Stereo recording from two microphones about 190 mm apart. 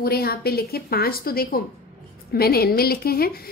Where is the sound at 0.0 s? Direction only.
55° left (ahead or behind).